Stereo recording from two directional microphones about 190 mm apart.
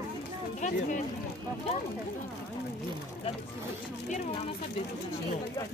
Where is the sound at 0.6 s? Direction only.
40° left (ahead or behind).